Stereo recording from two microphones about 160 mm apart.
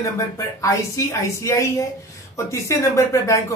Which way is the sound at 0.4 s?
20° left (ahead or behind).